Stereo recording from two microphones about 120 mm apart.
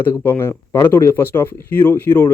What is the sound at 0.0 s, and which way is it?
Speech, 20° left (ahead or behind).